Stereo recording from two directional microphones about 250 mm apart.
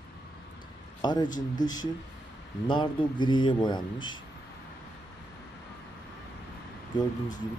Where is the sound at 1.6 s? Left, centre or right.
Centre.